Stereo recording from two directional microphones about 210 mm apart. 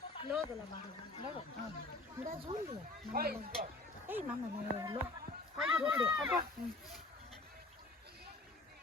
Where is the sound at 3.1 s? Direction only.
45° right (ahead or behind).